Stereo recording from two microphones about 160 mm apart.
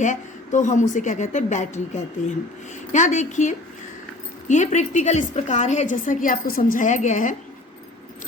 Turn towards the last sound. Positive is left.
turn(degrees=50)  # may be behind; listen again after turning